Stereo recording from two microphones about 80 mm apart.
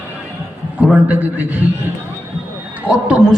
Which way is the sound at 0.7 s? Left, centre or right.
Centre.